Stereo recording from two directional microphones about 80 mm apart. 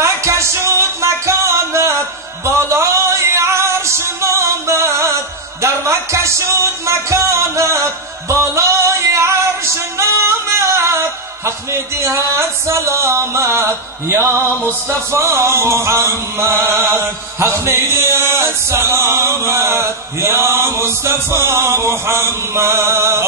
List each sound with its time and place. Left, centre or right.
0.0 s music: right
9.9 s singing: right
15.0 s chant: right